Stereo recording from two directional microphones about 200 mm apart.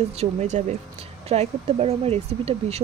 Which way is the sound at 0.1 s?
35° right (ahead or behind).